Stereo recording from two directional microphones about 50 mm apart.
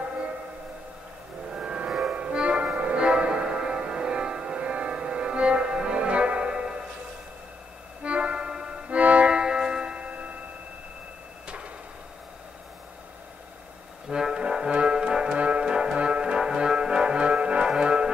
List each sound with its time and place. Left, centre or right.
1.5 s music: centre
8.0 s music: right
11.4 s a sound: right
14.0 s brass instrument: centre
17.6 s music: centre